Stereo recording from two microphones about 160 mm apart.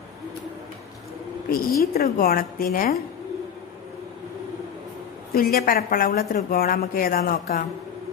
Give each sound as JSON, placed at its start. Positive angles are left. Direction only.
{"t": 1.5, "sound": "a woman's voice", "side_deg": 70}
{"t": 5.3, "sound": "a woman's voice", "side_deg": 65}